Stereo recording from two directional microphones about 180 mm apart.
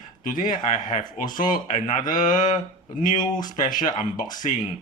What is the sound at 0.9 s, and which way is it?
Speech, 25° left (ahead or behind).